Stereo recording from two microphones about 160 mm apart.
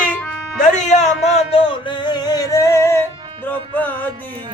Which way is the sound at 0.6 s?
45° left (ahead or behind).